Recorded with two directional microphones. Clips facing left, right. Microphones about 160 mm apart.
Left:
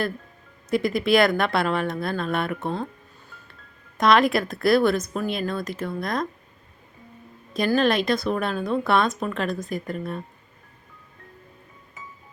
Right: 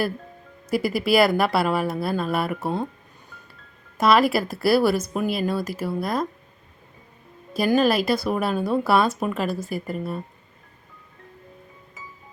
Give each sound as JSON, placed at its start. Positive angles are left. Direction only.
{"t": 0.7, "sound": "a woman's voice", "side_deg": -5}
{"t": 3.9, "sound": "a woman's voice", "side_deg": -5}
{"t": 7.8, "sound": "a woman's voice", "side_deg": -5}